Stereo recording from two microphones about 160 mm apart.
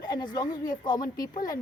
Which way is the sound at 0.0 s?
25° left (ahead or behind).